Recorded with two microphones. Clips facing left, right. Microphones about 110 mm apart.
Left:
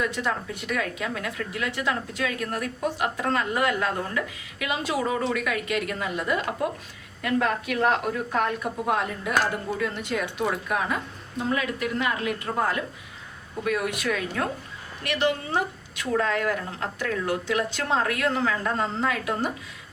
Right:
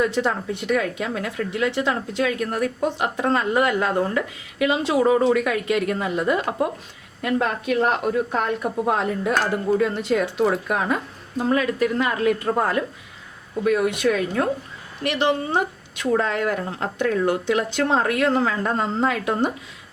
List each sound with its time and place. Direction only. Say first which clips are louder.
0.0 s a woman's voice: right 6 dB; 30° right (ahead or behind)
13.7 s speech: right 7 dB; 25° right (ahead or behind)